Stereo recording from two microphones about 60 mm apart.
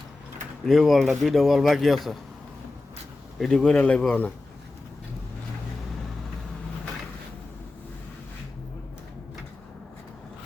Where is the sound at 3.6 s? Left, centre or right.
Left.